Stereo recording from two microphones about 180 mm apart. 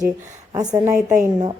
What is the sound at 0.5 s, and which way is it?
Speech, 20° right (ahead or behind).